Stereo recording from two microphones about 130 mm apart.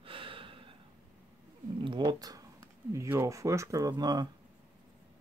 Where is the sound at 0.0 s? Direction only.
40° right (ahead or behind).